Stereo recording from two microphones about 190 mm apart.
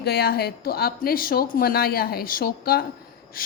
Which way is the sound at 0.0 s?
55° left (ahead or behind).